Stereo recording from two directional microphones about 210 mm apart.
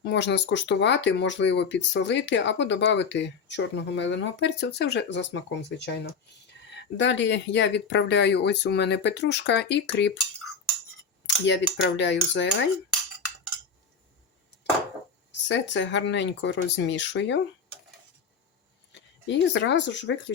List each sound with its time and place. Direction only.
0.0 s speech: 55° left (ahead or behind)
11.4 s speech: 55° left (ahead or behind)
15.3 s speech: 60° left (ahead or behind)
18.9 s speech: 60° left (ahead or behind)